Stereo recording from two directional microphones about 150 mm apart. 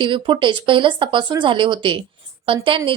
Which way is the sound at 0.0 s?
35° right (ahead or behind).